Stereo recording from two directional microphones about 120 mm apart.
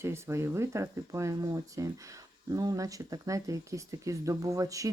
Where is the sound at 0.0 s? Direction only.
25° right (ahead or behind).